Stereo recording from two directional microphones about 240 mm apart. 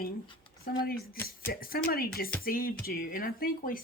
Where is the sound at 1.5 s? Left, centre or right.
Left.